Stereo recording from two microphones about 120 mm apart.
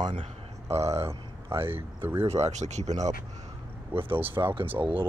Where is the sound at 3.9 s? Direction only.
50° right (ahead or behind).